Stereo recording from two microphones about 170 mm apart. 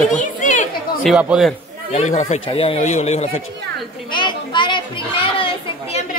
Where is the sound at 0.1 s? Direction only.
50° left (ahead or behind).